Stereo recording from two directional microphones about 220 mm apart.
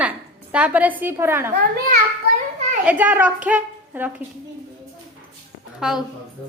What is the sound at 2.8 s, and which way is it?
A woman's voice, 5° right (ahead or behind).